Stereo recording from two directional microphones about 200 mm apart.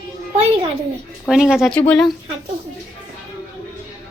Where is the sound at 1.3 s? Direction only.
Centre (ahead or behind).